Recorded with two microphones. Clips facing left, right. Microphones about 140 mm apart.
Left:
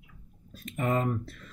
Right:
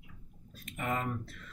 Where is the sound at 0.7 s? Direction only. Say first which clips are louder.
Left 7 dB; 40° left (ahead or behind).